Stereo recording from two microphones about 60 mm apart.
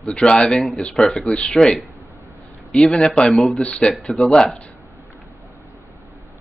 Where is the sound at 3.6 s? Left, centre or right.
Centre.